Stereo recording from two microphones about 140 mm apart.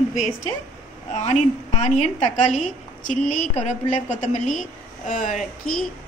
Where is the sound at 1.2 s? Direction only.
55° left (ahead or behind).